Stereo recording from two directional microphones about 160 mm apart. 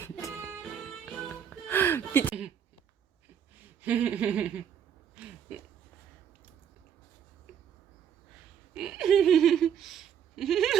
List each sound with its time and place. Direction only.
0.0 s music: 15° left (ahead or behind)
0.6 s music: 5° left (ahead or behind)
3.8 s a sound: 10° right (ahead or behind)
8.7 s laughter: 5° right (ahead or behind)